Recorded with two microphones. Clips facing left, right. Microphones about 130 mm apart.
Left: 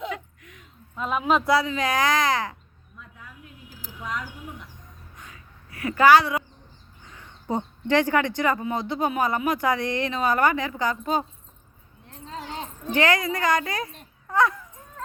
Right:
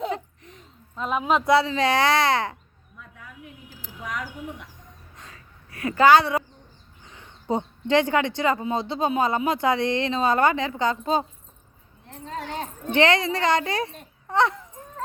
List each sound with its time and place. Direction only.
0.1 s a sound: 30° right (ahead or behind)
1.1 s speech: 15° right (ahead or behind)
4.0 s speech: 90° right
5.1 s gasp: 35° right (ahead or behind)
5.8 s speech: 25° right (ahead or behind)
7.0 s a sound: 20° right (ahead or behind)
8.4 s speech: 25° right (ahead or behind)
12.2 s speech: 60° right (ahead or behind)
12.9 s speech: 25° right (ahead or behind)